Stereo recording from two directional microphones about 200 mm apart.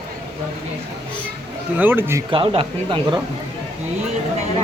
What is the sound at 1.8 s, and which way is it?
Speech, 10° right (ahead or behind).